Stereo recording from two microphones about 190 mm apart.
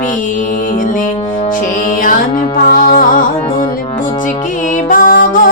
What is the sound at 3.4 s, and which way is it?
Music, 30° left (ahead or behind).